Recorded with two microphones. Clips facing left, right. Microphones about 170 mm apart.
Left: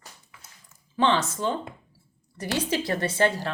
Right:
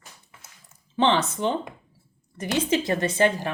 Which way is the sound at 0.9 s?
20° right (ahead or behind).